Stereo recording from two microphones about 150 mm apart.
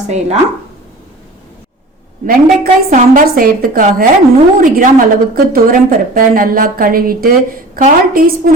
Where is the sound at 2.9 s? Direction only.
65° right (ahead or behind).